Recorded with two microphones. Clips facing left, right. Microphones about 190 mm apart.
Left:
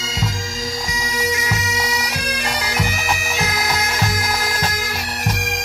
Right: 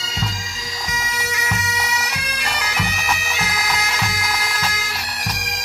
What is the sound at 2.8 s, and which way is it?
Bagpipes, 45° left (ahead or behind).